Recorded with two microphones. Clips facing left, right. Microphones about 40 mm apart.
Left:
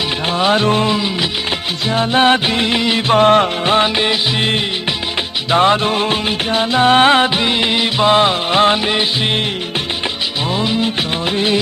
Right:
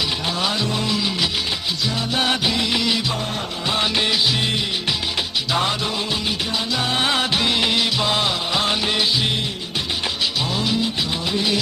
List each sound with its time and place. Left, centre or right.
0.3 s music: left
1.9 s music: left
3.1 s music: left
3.8 s music of bollywood: left
5.5 s music: left
7.3 s music of bollywood: left
10.5 s music: left